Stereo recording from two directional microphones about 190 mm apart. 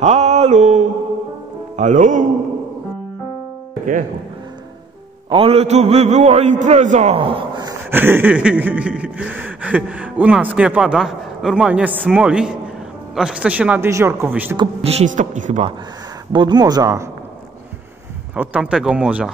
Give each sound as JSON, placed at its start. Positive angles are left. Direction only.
{"t": 0.0, "sound": "a sound", "side_deg": -35}
{"t": 1.8, "sound": "a man's voice", "side_deg": -40}
{"t": 5.3, "sound": "a man's voice", "side_deg": -30}
{"t": 7.9, "sound": "a sound", "side_deg": -10}
{"t": 14.6, "sound": "a man's voice", "side_deg": -35}
{"t": 16.3, "sound": "speech", "side_deg": -25}
{"t": 18.3, "sound": "speech", "side_deg": -5}